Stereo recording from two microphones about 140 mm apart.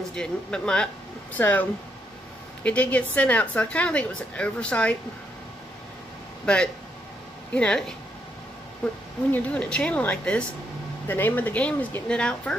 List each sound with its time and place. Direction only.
0.1 s speech: 5° left (ahead or behind)
6.4 s speech: 5° left (ahead or behind)